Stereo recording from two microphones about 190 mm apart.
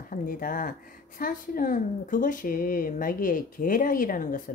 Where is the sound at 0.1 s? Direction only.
45° left (ahead or behind).